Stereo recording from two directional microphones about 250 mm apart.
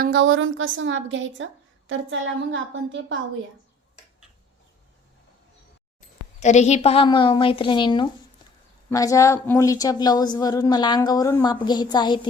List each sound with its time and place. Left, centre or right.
0.0 s a woman's voice: right
6.4 s a woman's voice: left